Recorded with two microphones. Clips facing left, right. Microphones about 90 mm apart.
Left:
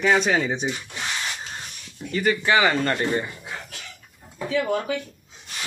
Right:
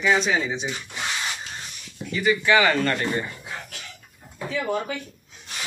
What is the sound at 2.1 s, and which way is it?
Speech, 45° left (ahead or behind).